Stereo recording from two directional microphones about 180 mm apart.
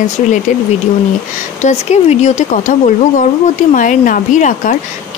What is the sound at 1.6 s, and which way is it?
Speech, 40° left (ahead or behind).